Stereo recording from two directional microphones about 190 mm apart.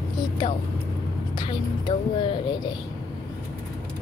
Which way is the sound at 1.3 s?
25° left (ahead or behind).